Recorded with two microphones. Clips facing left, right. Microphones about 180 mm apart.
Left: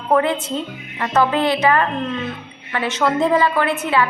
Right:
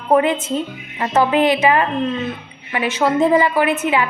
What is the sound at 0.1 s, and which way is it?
A woman's voice, 15° right (ahead or behind).